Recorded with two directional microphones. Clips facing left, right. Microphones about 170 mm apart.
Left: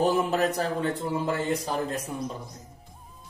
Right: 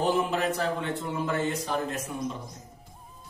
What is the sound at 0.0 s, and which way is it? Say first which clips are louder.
A man's voice: left 2 dB; 40° left (ahead or behind).